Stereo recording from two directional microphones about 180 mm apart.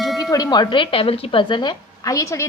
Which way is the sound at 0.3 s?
20° left (ahead or behind).